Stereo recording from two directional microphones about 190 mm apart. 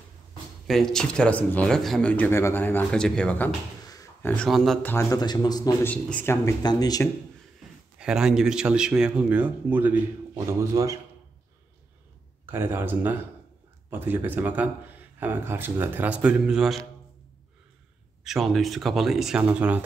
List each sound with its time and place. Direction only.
0.7 s speech: centre (ahead or behind)
3.8 s a sound: 20° left (ahead or behind)
4.3 s speech: centre (ahead or behind)
4.9 s speech: 20° left (ahead or behind)
5.9 s speech: 10° left (ahead or behind)
8.0 s speech: 5° right (ahead or behind)
12.4 s speech: 10° right (ahead or behind)
18.2 s speech: centre (ahead or behind)